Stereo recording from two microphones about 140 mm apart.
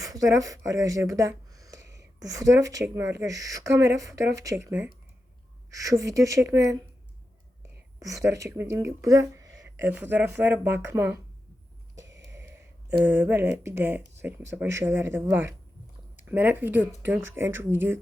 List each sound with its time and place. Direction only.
0.1 s speech: 25° right (ahead or behind)
7.9 s speech: 25° right (ahead or behind)
9.6 s speech: 15° right (ahead or behind)
12.0 s a sound: 20° right (ahead or behind)
14.2 s speech: 15° right (ahead or behind)